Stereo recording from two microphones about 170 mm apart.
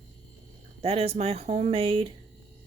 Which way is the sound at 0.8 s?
35° right (ahead or behind).